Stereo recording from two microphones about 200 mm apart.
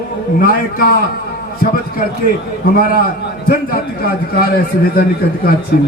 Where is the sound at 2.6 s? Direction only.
45° left (ahead or behind).